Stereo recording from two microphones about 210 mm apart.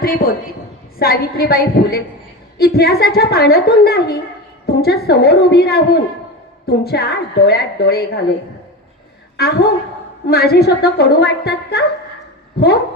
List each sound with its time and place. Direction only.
0.0 s a woman's voice: 45° left (ahead or behind)
9.4 s a woman's voice: 50° left (ahead or behind)